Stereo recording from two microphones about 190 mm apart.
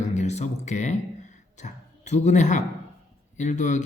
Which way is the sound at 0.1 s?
35° left (ahead or behind).